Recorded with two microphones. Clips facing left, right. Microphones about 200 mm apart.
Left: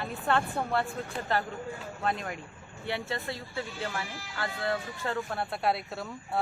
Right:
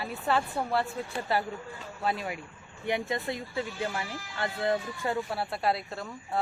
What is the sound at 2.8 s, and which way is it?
Speech, 15° right (ahead or behind).